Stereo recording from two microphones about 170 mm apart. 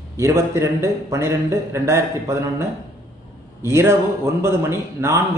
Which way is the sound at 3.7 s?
15° right (ahead or behind).